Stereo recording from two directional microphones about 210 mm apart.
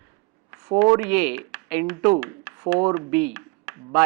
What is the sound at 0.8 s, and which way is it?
Speech, 10° right (ahead or behind).